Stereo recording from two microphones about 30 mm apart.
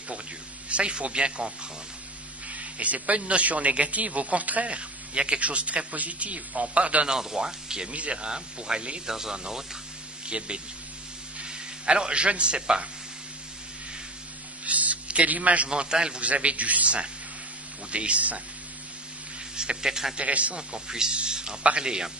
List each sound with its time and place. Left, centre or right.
0.7 s speech: right
2.5 s a man's voice: right
4.6 s a man's voice: right
7.1 s speech: centre
7.9 s speech: right
9.0 s speech: centre
10.2 s a man's voice: right
14.6 s a sound: right
15.2 s a man's voice: right
15.7 s speech: right
16.2 s a man's voice: right
19.5 s speech: right
20.2 s a man's voice: right
20.5 s speech: right